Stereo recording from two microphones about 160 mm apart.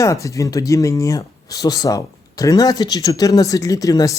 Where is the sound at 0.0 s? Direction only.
20° left (ahead or behind).